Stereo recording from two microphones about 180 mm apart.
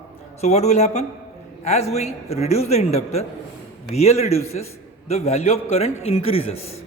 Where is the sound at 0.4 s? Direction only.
40° left (ahead or behind).